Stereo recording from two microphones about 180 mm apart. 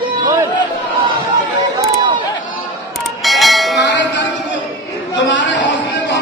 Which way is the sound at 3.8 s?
80° left.